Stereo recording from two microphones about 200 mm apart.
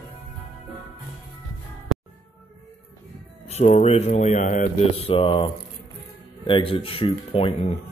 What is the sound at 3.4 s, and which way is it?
Speech, 30° left (ahead or behind).